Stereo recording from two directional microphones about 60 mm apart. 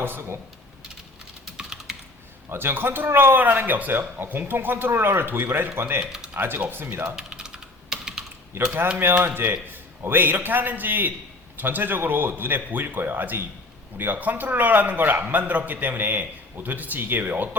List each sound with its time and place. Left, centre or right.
0.0 s speech: right
1.5 s typing: centre
2.5 s speech: right
6.1 s speech: centre
6.3 s speech: right
7.2 s typing: centre
8.5 s a man's voice: right